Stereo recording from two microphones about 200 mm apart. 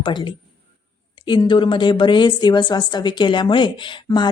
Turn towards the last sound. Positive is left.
turn(degrees=25)  # may be behind; listen again after turning